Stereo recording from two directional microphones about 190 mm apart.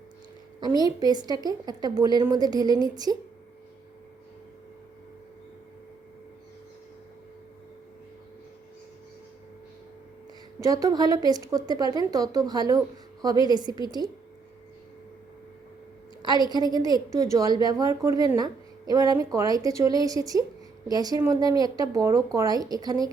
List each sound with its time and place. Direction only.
0.9 s a woman's voice: 20° right (ahead or behind)
10.6 s a woman's voice: 20° right (ahead or behind)
16.2 s a woman's voice: 20° right (ahead or behind)